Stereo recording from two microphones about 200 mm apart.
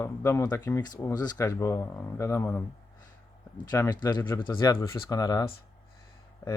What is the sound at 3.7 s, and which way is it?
Speech, 15° left (ahead or behind).